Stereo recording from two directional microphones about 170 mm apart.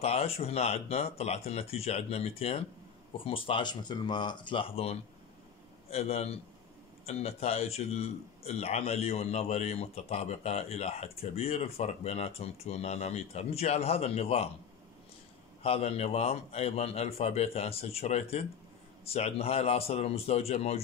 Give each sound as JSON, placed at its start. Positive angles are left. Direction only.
{"t": 0.0, "sound": "a man's voice", "side_deg": 35}
{"t": 15.6, "sound": "a man's voice", "side_deg": 40}